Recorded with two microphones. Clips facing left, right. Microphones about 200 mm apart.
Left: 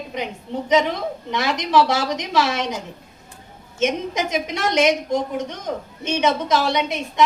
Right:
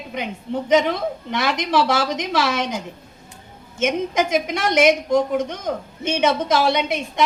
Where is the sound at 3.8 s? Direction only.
50° right (ahead or behind).